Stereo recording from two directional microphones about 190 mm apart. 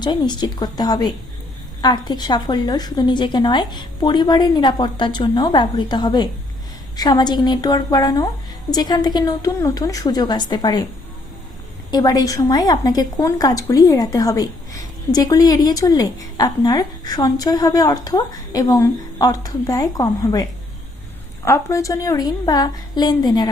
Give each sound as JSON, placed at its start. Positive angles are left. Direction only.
{"t": 0.0, "sound": "a woman's voice", "side_deg": 25}
{"t": 11.9, "sound": "a woman's voice", "side_deg": 20}